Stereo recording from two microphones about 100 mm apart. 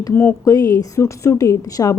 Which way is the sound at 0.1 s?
25° left (ahead or behind).